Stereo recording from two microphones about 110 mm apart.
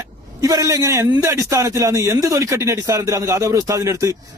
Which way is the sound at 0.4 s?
30° right (ahead or behind).